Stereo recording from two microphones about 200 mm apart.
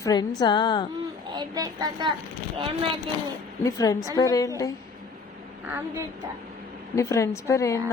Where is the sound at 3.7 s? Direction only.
15° left (ahead or behind).